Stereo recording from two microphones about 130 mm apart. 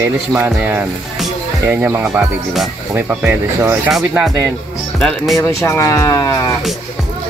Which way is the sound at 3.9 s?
Centre (ahead or behind).